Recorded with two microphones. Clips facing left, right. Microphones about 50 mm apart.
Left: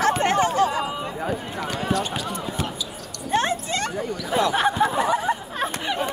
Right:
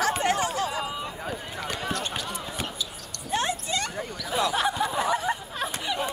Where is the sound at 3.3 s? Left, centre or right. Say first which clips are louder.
Left 5 dB; left.